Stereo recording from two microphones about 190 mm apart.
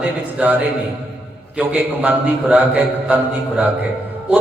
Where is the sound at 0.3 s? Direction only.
10° right (ahead or behind).